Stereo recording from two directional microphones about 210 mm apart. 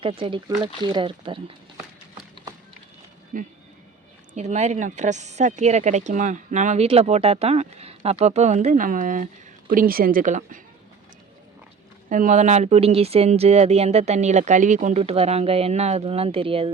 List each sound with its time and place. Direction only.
0.0 s speech: 25° right (ahead or behind)
3.3 s speech: 40° right (ahead or behind)
12.0 s speech: 40° right (ahead or behind)